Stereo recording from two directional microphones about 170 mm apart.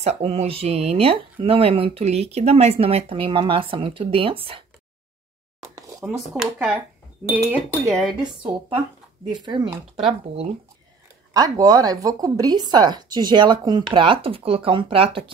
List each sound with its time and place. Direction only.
0.0 s speech: 40° right (ahead or behind)
5.6 s a sound: 20° right (ahead or behind)
6.0 s speech: centre (ahead or behind)
8.5 s speech: 30° right (ahead or behind)
9.9 s speech: 35° right (ahead or behind)
11.3 s speech: 20° right (ahead or behind)